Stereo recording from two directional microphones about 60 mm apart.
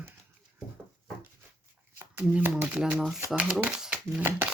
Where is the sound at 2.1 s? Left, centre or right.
Right.